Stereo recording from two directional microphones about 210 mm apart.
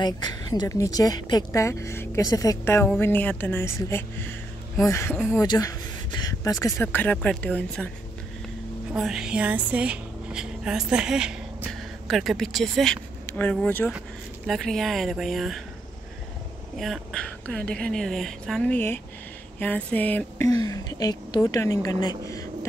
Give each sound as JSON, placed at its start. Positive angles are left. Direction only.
{"t": 0.0, "sound": "a woman's voice", "side_deg": 20}
{"t": 8.9, "sound": "speech", "side_deg": 0}
{"t": 16.7, "sound": "a woman's voice", "side_deg": 0}
{"t": 22.2, "sound": "a sound", "side_deg": 15}